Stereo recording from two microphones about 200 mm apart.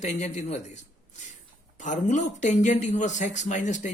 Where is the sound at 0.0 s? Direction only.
35° left (ahead or behind).